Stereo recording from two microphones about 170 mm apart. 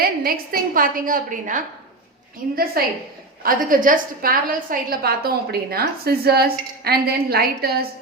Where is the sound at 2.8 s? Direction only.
60° right (ahead or behind).